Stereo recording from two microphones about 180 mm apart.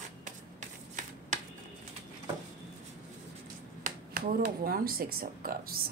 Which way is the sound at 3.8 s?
50° right (ahead or behind).